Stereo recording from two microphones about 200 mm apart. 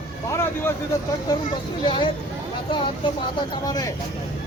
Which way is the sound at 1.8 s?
25° left (ahead or behind).